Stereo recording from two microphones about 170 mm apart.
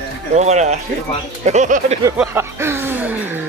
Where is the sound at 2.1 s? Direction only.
15° right (ahead or behind).